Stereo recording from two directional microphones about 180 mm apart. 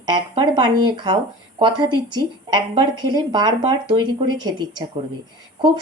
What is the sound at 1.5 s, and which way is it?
A woman's voice, 25° right (ahead or behind).